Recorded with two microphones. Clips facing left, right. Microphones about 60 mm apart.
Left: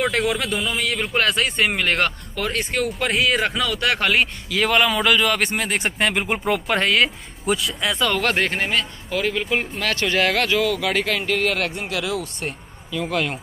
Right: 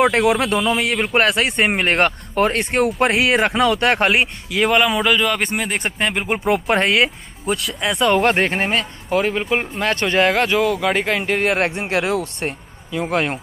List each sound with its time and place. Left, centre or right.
0.1 s speech: right
4.2 s speech: centre
6.7 s speech: centre
7.4 s speech: centre
8.0 s speech: right